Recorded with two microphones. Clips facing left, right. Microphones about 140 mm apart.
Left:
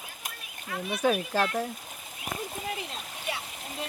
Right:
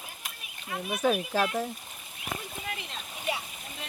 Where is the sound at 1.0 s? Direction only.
Centre (ahead or behind).